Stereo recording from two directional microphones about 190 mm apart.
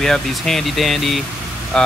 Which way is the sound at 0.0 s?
Centre (ahead or behind).